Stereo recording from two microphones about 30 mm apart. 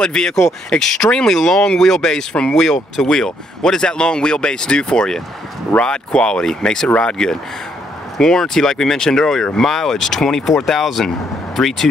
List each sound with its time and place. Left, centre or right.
0.0 s speech: left
0.7 s speech: centre
2.5 s speech: centre